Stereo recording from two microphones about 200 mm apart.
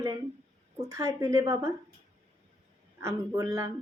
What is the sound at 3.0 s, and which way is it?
Speech, 15° right (ahead or behind).